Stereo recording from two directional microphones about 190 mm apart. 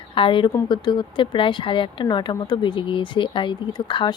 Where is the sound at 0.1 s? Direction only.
25° left (ahead or behind).